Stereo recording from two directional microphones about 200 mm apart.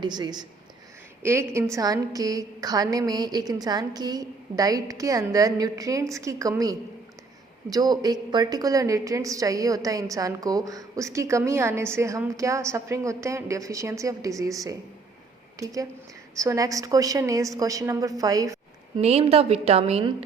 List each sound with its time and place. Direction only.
0.0 s a woman's voice: 20° right (ahead or behind)
18.9 s a woman's voice: 30° right (ahead or behind)